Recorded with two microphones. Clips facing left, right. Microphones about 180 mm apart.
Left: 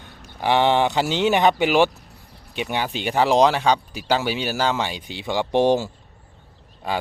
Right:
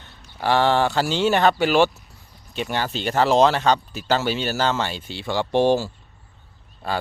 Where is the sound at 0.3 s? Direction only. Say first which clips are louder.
Left 1 dB; 15° left (ahead or behind).